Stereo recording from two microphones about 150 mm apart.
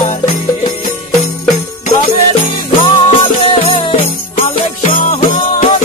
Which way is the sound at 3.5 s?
35° left (ahead or behind).